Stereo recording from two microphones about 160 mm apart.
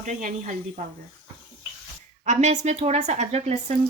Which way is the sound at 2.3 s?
45° right (ahead or behind).